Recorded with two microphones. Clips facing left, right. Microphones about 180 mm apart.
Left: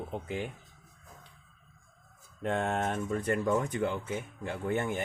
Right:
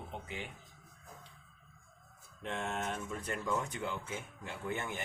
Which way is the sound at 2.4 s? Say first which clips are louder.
Left 8 dB; 50° left (ahead or behind).